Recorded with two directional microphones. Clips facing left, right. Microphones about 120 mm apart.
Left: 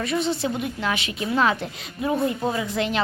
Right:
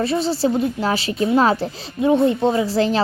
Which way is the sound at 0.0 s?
30° right (ahead or behind).